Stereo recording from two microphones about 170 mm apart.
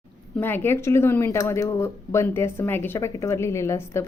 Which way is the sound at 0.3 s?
10° left (ahead or behind).